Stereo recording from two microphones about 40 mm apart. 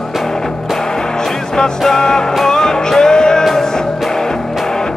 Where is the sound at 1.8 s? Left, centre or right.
Centre.